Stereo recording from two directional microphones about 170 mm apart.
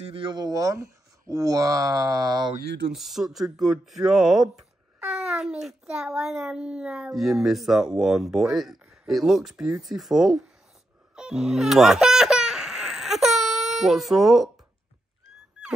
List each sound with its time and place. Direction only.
0.1 s speech: 30° right (ahead or behind)
2.6 s speech: 80° right
2.9 s speech: centre (ahead or behind)
11.1 s a sound: 5° right (ahead or behind)